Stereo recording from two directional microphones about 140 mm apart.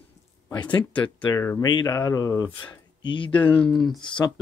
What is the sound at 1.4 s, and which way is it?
Speech, 15° left (ahead or behind).